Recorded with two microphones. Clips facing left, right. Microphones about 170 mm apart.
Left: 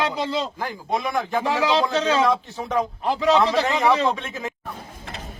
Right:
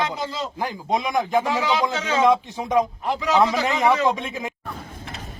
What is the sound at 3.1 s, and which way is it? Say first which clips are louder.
A man's voice: left 1 dB; 30° left (ahead or behind).